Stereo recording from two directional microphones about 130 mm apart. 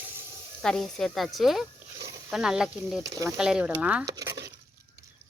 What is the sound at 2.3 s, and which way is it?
Speech, 5° right (ahead or behind).